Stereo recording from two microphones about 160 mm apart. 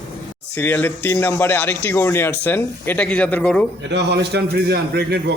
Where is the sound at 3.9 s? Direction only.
90° right.